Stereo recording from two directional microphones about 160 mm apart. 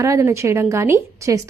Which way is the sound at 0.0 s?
20° right (ahead or behind).